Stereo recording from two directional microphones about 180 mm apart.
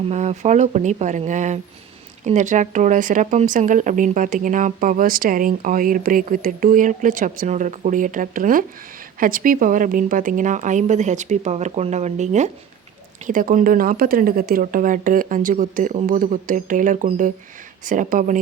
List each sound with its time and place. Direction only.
0.1 s speech: 40° right (ahead or behind)